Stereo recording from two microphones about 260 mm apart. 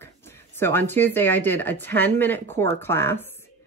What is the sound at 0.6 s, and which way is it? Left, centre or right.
Speech, centre.